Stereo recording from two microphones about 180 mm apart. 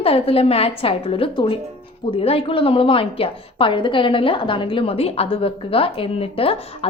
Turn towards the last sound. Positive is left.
turn(degrees=30)  # may be behind; listen again after turning